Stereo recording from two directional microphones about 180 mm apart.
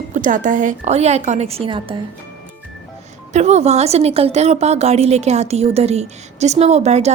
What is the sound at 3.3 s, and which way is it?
A woman's voice, 40° right (ahead or behind).